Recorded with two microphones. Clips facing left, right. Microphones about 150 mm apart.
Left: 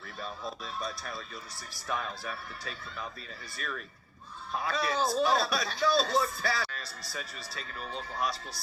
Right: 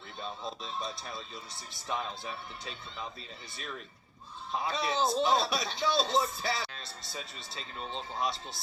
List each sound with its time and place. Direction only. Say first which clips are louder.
0.2 s a man's voice: even; 25° right (ahead or behind)